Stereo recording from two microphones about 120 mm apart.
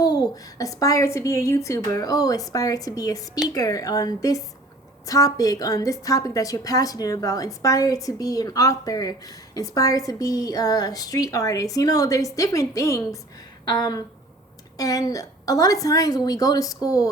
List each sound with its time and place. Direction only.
0.0 s a woman's voice: 35° left (ahead or behind)
13.7 s a sound: 35° left (ahead or behind)
14.8 s a woman's voice: 30° left (ahead or behind)